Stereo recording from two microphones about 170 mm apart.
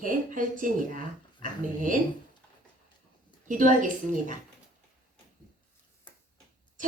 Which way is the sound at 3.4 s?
50° right (ahead or behind).